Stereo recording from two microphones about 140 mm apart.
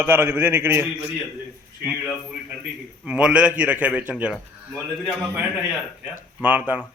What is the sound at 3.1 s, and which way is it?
A man's voice, 10° right (ahead or behind).